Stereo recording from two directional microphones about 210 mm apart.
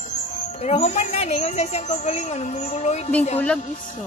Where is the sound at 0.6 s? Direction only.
30° left (ahead or behind).